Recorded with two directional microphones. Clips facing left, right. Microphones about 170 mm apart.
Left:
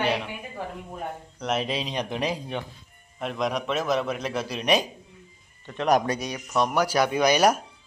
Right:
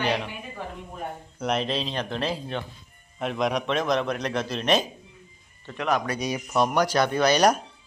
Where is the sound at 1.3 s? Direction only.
Centre (ahead or behind).